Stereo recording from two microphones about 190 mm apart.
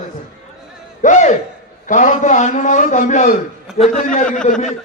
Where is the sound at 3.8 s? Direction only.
5° left (ahead or behind).